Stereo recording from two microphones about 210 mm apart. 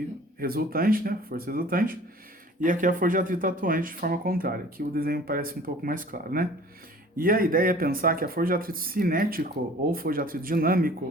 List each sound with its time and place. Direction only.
0.3 s speech: 45° right (ahead or behind)